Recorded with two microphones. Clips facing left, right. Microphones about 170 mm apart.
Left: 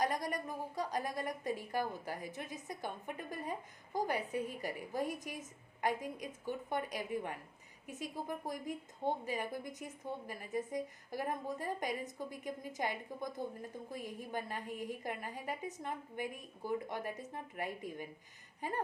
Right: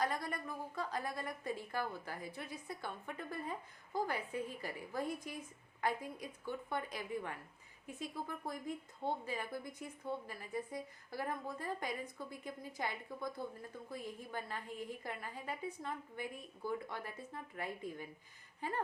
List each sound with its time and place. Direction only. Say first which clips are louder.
0.0 s a woman's voice: left 3 dB; 15° left (ahead or behind)